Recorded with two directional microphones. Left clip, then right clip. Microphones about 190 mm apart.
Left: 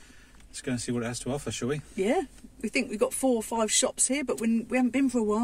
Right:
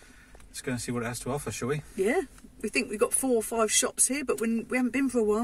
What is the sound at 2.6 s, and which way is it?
Speech, 15° left (ahead or behind).